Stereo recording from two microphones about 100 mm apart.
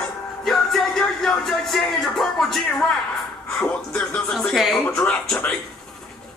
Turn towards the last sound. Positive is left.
turn(degrees=5)  # may be behind; listen again after turning